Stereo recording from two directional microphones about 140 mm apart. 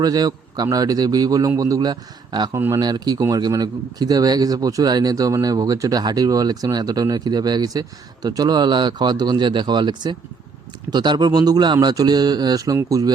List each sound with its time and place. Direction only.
0.0 s a man's voice: 30° right (ahead or behind)
2.6 s a man's voice: 20° right (ahead or behind)